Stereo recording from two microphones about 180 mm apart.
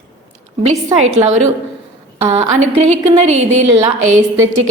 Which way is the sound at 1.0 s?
40° right (ahead or behind).